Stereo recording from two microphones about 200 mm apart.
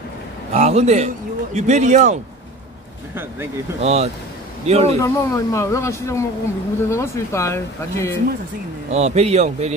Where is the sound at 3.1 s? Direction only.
10° right (ahead or behind).